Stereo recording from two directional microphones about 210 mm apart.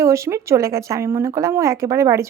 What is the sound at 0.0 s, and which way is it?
Speech, 15° right (ahead or behind).